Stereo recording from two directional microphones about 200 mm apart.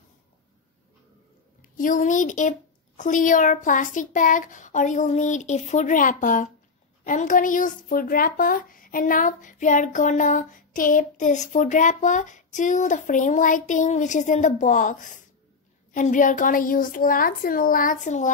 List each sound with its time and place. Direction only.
1.8 s a woman's voice: 40° left (ahead or behind)